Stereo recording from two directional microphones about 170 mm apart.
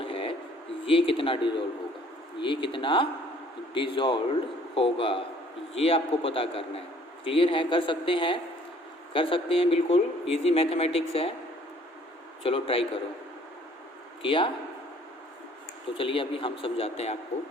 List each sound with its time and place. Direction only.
0.0 s a sound: 30° left (ahead or behind)
0.9 s speech: 30° left (ahead or behind)
12.4 s speech: 35° left (ahead or behind)
14.2 s a man's voice: 30° left (ahead or behind)
16.0 s speech: 30° left (ahead or behind)